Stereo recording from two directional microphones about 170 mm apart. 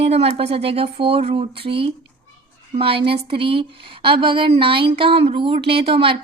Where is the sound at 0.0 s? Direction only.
35° right (ahead or behind).